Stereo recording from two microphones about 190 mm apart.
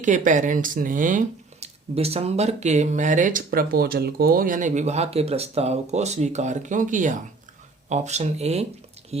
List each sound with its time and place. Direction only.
0.0 s speech: 40° right (ahead or behind)
1.6 s speech: 30° right (ahead or behind)